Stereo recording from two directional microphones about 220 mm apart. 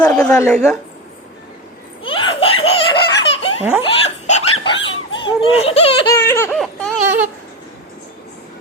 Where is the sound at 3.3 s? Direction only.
30° left (ahead or behind).